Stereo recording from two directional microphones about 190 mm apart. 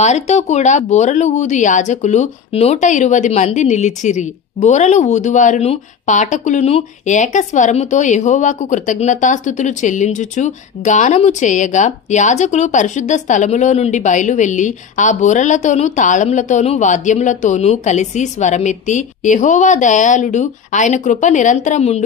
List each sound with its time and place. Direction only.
0.0 s speech: 35° left (ahead or behind)